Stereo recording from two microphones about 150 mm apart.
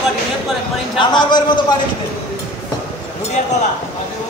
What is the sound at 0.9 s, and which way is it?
Speech, 30° left (ahead or behind).